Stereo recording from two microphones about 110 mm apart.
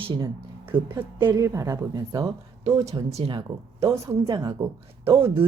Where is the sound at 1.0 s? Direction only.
20° right (ahead or behind).